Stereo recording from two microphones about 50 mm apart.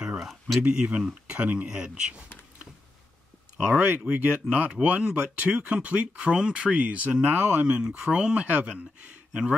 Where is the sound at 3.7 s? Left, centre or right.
Right.